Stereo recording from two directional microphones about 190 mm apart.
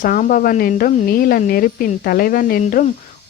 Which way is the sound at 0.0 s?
45° left (ahead or behind).